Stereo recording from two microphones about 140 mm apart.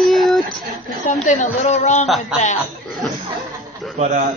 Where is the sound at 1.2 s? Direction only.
55° left (ahead or behind).